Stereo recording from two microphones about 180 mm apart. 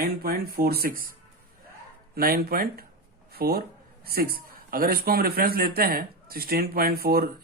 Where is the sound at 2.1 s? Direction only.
55° right (ahead or behind).